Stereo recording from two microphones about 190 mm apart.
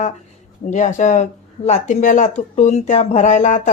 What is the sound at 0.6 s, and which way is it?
Speech, 40° left (ahead or behind).